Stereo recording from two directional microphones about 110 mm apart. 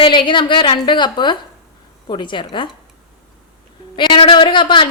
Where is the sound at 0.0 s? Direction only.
50° left (ahead or behind).